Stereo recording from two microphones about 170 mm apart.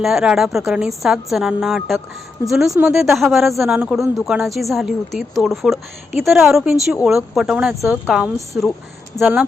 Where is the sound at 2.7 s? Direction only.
15° right (ahead or behind).